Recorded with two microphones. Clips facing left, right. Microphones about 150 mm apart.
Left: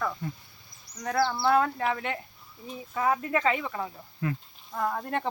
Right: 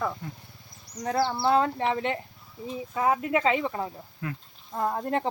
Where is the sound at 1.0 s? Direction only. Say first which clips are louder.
Right 1 dB; 25° right (ahead or behind).